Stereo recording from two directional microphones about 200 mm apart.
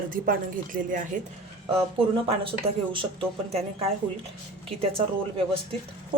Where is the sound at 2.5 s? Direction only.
25° right (ahead or behind).